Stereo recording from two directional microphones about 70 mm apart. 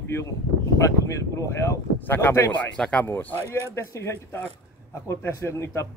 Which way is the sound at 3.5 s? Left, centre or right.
Left.